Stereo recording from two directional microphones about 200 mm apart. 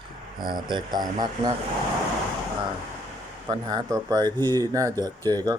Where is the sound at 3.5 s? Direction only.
20° right (ahead or behind).